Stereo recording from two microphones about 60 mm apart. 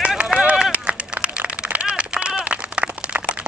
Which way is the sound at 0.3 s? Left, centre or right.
Centre.